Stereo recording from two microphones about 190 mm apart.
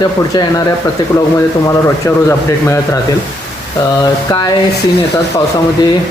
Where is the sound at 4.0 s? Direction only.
20° left (ahead or behind).